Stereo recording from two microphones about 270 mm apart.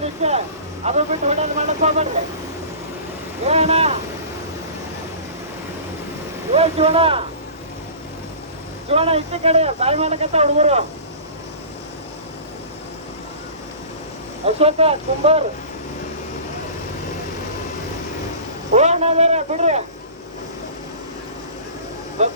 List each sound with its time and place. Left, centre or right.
0.0 s a sound: right
0.9 s speech: right
3.4 s speech: right
6.5 s speech: right
8.9 s speech: right
14.4 s speech: right
18.7 s speech: right
22.2 s speech: right